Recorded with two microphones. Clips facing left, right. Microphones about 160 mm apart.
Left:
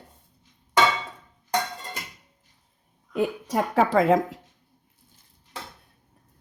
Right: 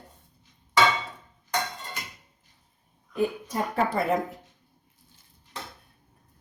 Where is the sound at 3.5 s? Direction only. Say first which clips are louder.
Left 5 dB; 90° left.